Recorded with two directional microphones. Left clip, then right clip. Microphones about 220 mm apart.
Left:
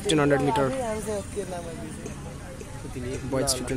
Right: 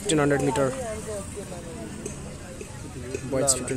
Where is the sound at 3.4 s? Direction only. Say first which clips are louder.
Right 2 dB; 50° right (ahead or behind).